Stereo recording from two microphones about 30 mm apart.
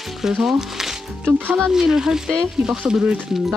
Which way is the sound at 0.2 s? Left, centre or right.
Centre.